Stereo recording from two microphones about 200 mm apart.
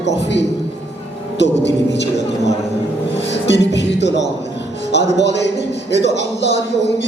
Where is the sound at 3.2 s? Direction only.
60° left (ahead or behind).